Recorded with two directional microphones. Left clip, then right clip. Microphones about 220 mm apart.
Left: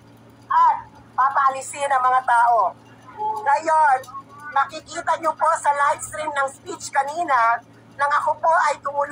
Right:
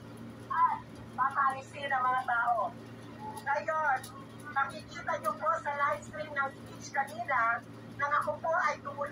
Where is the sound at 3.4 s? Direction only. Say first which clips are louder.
Left 14 dB; 45° left (ahead or behind).